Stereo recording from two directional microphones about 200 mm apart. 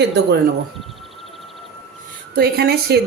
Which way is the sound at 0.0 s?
55° right (ahead or behind).